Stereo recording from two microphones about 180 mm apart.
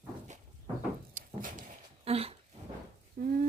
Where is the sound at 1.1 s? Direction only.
50° right (ahead or behind).